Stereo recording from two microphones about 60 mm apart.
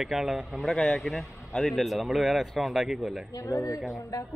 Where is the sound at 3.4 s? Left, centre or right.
Left.